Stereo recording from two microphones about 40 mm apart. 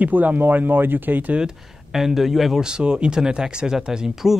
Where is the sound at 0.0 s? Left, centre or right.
Right.